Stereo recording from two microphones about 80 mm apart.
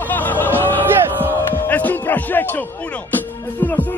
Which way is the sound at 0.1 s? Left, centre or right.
Left.